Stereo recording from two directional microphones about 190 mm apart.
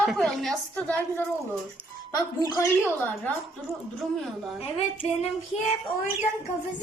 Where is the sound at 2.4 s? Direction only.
20° left (ahead or behind).